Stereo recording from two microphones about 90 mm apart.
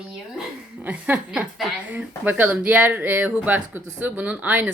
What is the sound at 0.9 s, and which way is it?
A woman's voice, 20° right (ahead or behind).